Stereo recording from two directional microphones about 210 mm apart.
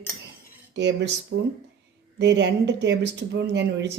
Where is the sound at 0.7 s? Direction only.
55° right (ahead or behind).